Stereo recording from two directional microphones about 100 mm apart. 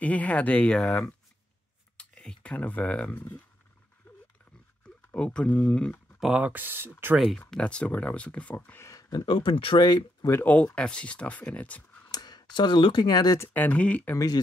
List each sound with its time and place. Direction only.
0.0 s speech: 15° left (ahead or behind)
5.1 s speech: 10° left (ahead or behind)
6.1 s speech: 5° right (ahead or behind)
6.5 s speech: 20° right (ahead or behind)
7.3 s speech: 10° left (ahead or behind)
8.8 s a sound: 35° left (ahead or behind)
9.2 s speech: 55° left (ahead or behind)
9.8 s speech: 45° left (ahead or behind)
10.3 s speech: 15° left (ahead or behind)
12.1 s speech: 45° left (ahead or behind)
13.5 s speech: 15° left (ahead or behind)
14.1 s speech: 40° left (ahead or behind)